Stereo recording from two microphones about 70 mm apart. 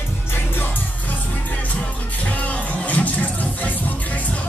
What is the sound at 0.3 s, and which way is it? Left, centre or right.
Music, left.